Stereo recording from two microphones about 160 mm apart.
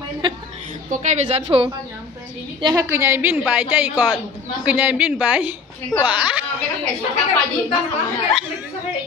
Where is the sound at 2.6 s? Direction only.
25° right (ahead or behind).